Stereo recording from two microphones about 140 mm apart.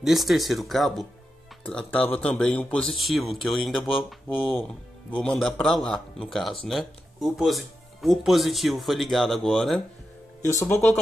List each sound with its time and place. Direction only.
0.0 s speech: centre (ahead or behind)
10.4 s speech: 20° left (ahead or behind)